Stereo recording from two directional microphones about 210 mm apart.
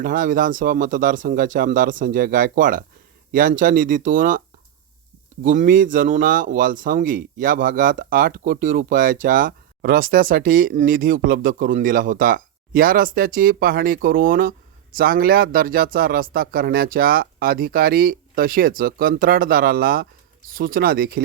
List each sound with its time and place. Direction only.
0.0 s a man's voice: 40° right (ahead or behind)